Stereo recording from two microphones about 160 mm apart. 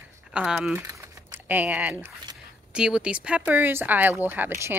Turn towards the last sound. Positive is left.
turn(degrees=-15)  # may be behind; listen again after turning